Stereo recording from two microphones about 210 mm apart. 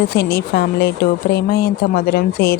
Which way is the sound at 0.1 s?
50° left (ahead or behind).